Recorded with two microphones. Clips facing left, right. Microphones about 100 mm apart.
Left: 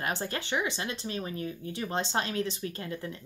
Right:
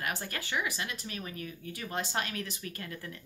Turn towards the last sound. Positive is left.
turn(degrees=25)  # may be behind; listen again after turning